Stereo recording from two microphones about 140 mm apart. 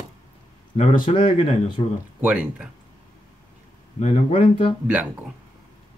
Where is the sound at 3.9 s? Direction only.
50° left (ahead or behind).